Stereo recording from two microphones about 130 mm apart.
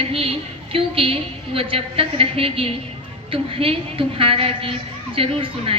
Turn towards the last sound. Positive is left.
turn(degrees=-45)  # may be behind; listen again after turning